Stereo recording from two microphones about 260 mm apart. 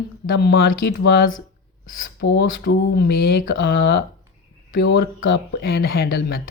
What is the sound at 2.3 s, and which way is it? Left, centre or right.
Speech, left.